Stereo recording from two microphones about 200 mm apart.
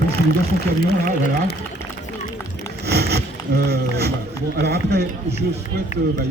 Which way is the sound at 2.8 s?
55° right (ahead or behind).